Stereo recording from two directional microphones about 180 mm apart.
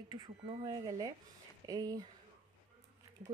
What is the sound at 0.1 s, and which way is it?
Speech, 25° right (ahead or behind).